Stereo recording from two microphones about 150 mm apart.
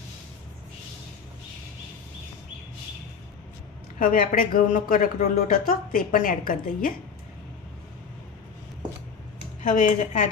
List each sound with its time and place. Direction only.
3.9 s speech: 65° left (ahead or behind)
9.6 s speech: 60° left (ahead or behind)